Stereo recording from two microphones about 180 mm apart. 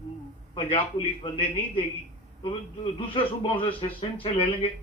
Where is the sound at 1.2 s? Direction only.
30° left (ahead or behind).